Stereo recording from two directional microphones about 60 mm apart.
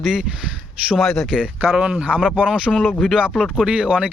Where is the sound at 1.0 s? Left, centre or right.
Centre.